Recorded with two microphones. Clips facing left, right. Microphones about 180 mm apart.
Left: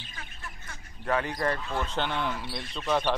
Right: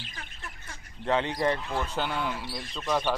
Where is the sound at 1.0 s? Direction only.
20° right (ahead or behind).